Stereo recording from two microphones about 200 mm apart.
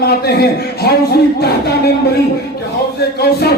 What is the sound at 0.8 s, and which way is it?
Speech, 50° left (ahead or behind).